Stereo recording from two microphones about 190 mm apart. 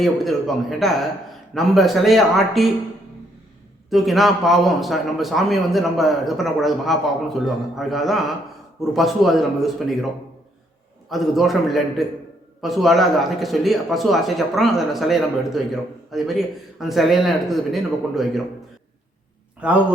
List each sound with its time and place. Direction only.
0.0 s a man's voice: centre (ahead or behind)
3.8 s a man's voice: centre (ahead or behind)
11.1 s a man's voice: centre (ahead or behind)
19.5 s a man's voice: 5° right (ahead or behind)